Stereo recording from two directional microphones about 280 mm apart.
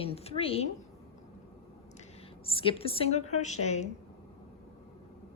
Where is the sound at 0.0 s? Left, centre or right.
Left.